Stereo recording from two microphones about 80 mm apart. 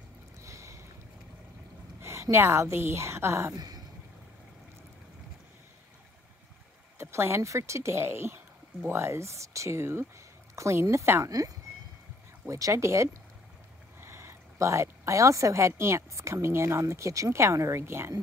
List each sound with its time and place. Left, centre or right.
0.4 s boat: right
2.0 s a sound: right
2.3 s speech: right
3.5 s a sound: right
7.0 s speech: right
11.2 s speech: right